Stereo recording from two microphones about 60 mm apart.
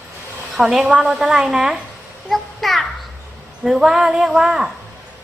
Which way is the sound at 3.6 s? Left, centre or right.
Right.